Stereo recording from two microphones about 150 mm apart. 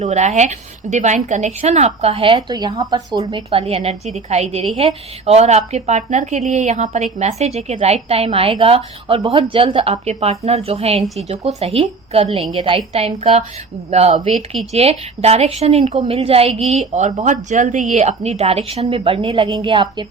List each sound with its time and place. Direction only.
0.0 s a woman's voice: 50° right (ahead or behind); by 3.6 s 30° right (ahead or behind)
3.6 s a woman's voice: 40° right (ahead or behind)